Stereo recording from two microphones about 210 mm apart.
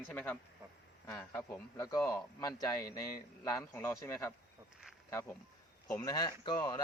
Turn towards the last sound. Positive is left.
turn(degrees=15)  # may be behind; listen again after turning